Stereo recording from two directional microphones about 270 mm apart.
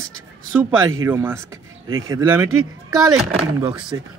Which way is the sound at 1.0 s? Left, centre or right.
Centre.